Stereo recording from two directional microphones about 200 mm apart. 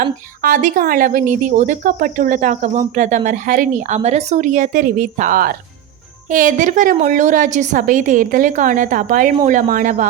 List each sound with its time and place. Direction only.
0.0 s speech: 40° right (ahead or behind)